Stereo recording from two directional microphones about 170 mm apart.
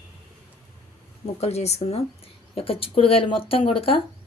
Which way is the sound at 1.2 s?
40° left (ahead or behind).